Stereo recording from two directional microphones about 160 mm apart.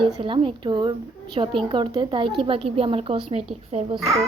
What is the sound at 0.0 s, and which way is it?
A woman's voice, 35° right (ahead or behind).